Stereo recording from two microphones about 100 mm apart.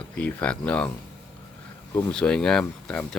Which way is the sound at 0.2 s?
15° left (ahead or behind).